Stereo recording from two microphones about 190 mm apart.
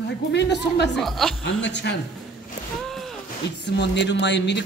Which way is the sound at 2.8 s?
Centre (ahead or behind).